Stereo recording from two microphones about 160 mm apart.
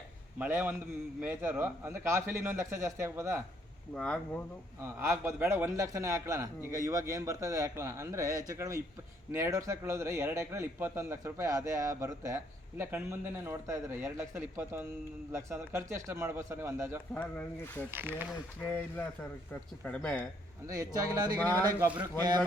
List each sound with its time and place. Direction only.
0.3 s a man's voice: 10° right (ahead or behind)
3.9 s speech: 5° left (ahead or behind)
4.8 s a man's voice: 15° right (ahead or behind)
17.2 s speech: 10° left (ahead or behind)
20.7 s a man's voice: 20° right (ahead or behind)